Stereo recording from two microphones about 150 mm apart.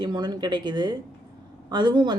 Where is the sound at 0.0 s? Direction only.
30° right (ahead or behind).